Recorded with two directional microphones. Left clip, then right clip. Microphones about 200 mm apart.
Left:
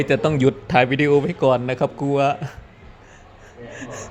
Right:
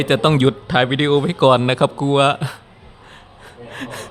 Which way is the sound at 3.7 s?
20° right (ahead or behind).